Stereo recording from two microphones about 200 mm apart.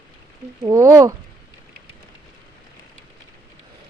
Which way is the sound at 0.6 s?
15° right (ahead or behind).